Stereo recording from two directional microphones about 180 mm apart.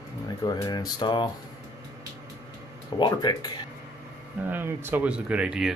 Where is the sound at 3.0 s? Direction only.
25° left (ahead or behind).